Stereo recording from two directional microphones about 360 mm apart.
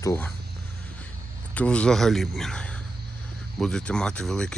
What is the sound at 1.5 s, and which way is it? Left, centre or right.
Speech, centre.